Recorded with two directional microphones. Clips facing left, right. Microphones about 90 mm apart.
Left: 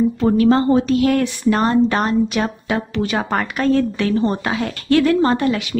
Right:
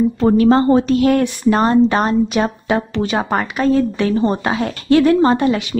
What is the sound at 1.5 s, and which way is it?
Speech, 25° right (ahead or behind).